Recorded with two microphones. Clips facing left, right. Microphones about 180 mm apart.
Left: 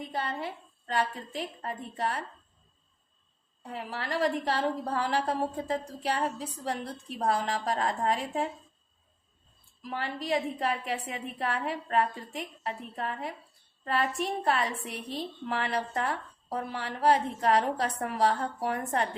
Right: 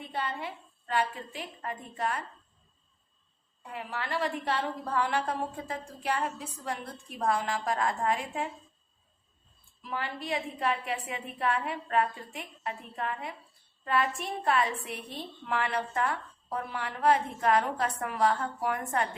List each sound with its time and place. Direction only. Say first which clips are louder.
0.1 s a woman's voice: right 1 dB; 40° left (ahead or behind)
3.6 s a woman's voice: left 1 dB; 40° left (ahead or behind)
9.8 s a woman's voice: left 1 dB; 40° left (ahead or behind)